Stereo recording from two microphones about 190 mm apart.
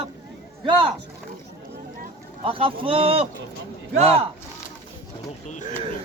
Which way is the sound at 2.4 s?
30° right (ahead or behind).